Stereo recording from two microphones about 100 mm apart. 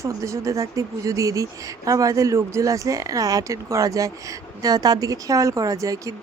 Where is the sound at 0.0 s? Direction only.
30° right (ahead or behind).